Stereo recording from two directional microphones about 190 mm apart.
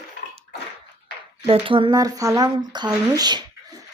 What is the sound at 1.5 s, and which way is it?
Speech, 30° right (ahead or behind).